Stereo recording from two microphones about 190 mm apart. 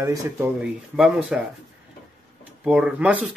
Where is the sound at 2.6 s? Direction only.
5° right (ahead or behind).